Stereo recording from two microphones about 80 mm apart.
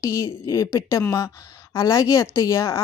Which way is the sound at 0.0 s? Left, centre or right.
Left.